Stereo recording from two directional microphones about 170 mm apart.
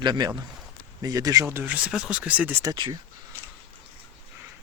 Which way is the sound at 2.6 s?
20° right (ahead or behind).